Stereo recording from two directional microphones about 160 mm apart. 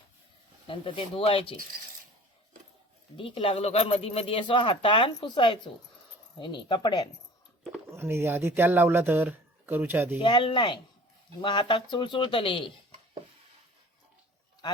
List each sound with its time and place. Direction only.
0.7 s speech: 35° left (ahead or behind)
3.2 s speech: 35° left (ahead or behind)
7.9 s speech: 15° right (ahead or behind)
10.2 s speech: 30° left (ahead or behind)